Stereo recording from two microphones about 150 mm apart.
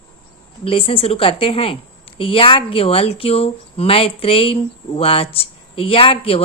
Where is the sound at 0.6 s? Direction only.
40° left (ahead or behind).